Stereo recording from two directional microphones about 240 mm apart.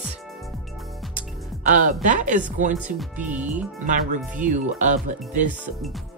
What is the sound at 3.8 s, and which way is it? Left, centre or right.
Speech, right.